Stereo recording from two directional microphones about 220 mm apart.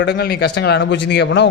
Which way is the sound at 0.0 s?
50° left (ahead or behind).